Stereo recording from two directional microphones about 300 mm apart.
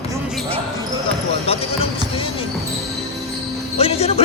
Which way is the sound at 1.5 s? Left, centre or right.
Centre.